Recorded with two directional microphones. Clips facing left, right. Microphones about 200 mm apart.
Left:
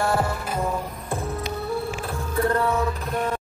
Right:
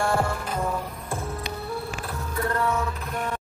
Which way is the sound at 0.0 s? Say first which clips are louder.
Left 1 dB; 5° left (ahead or behind).